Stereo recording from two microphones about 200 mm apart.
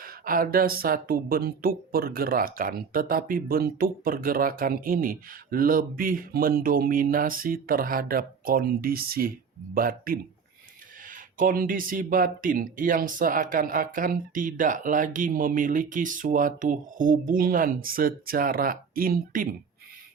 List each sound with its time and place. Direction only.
0.0 s speech: 45° right (ahead or behind)